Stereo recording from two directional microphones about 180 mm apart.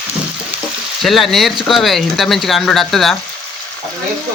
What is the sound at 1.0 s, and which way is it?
Speech, centre (ahead or behind).